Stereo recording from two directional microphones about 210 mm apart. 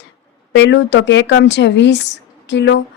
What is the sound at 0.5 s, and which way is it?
Speech, 55° left (ahead or behind).